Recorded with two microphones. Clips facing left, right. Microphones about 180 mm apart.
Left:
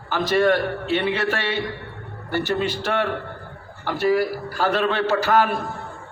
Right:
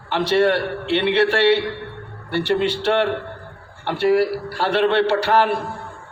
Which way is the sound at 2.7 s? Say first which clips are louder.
Right 4 dB; 30° right (ahead or behind).